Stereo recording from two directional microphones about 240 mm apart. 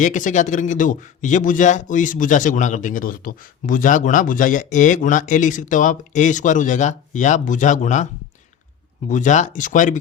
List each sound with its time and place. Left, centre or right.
0.0 s speech: left
9.0 s speech: left